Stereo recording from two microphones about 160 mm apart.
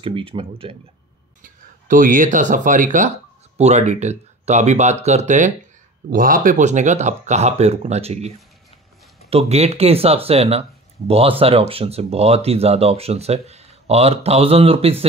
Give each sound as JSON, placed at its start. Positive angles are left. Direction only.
{"t": 0.0, "sound": "speech", "side_deg": -35}
{"t": 1.4, "sound": "speech", "side_deg": -55}
{"t": 6.0, "sound": "speech", "side_deg": -60}
{"t": 9.3, "sound": "speech", "side_deg": -40}